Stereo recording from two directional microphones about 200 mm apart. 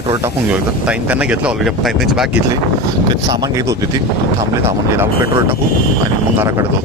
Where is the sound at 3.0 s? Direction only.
20° right (ahead or behind).